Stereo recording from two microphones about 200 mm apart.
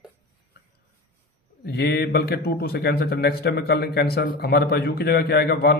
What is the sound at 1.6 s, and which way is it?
Speech, 55° left (ahead or behind).